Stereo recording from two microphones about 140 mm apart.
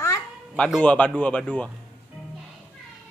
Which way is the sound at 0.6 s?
10° left (ahead or behind).